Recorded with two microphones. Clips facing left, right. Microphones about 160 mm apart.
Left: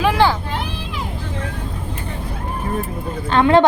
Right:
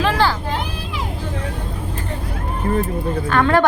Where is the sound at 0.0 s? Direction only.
15° left (ahead or behind).